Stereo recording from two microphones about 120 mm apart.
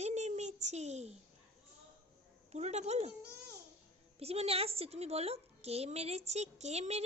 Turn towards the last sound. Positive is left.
turn(degrees=-65)  # may be behind; listen again after turning